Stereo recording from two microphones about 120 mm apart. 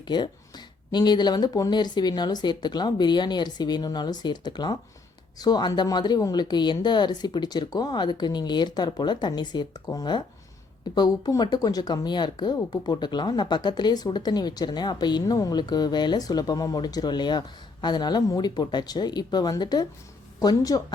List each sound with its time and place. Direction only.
0.0 s speech: 35° left (ahead or behind)